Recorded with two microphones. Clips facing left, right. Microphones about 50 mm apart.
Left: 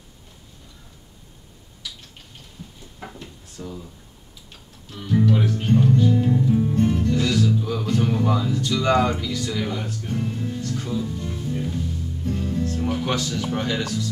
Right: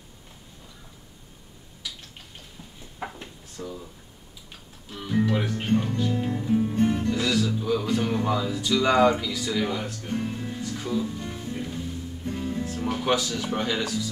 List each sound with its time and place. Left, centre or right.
2.6 s a sound: centre
3.0 s drawer open or close: right
3.5 s speech: centre
4.5 s music: centre
12.3 s speech: centre